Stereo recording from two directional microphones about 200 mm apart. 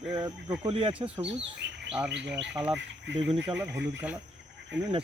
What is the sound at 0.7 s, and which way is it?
Speech, 25° right (ahead or behind).